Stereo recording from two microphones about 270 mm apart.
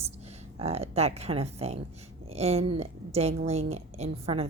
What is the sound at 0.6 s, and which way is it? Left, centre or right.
A woman's voice, right.